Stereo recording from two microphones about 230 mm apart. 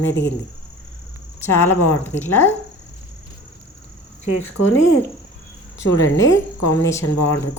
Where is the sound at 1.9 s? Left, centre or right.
Centre.